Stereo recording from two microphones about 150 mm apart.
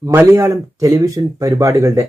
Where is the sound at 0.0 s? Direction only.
20° right (ahead or behind).